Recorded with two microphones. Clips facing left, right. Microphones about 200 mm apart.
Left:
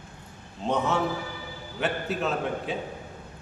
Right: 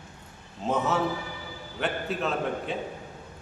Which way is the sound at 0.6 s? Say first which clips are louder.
Even; 5° right (ahead or behind).